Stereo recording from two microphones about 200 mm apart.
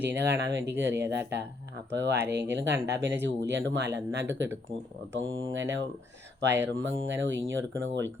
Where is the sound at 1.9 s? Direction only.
60° right (ahead or behind).